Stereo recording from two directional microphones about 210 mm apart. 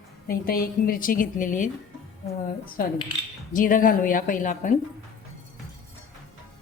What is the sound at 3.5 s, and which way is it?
Music, 40° left (ahead or behind).